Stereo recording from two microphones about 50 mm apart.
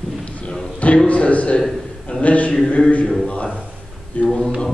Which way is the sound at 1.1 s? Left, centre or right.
Left.